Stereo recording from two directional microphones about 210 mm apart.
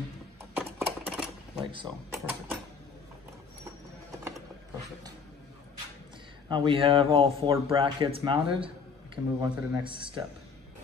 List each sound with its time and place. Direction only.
0.6 s a sound: 5° right (ahead or behind)
1.7 s speech: 25° right (ahead or behind)
6.5 s speech: 25° right (ahead or behind)